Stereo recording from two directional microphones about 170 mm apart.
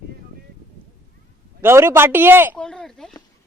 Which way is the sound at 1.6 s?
15° right (ahead or behind).